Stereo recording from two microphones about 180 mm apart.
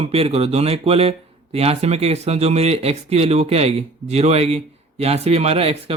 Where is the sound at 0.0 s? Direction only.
35° right (ahead or behind).